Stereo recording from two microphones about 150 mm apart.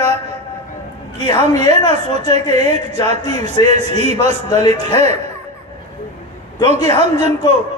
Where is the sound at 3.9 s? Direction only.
45° right (ahead or behind).